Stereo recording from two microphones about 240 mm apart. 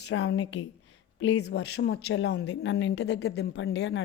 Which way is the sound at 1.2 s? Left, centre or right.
Left.